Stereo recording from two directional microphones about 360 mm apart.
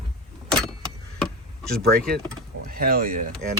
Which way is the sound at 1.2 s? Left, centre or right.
Centre.